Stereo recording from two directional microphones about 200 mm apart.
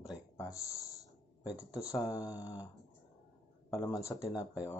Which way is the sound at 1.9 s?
20° left (ahead or behind).